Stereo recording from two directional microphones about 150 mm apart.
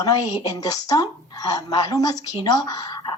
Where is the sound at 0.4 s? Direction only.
25° left (ahead or behind).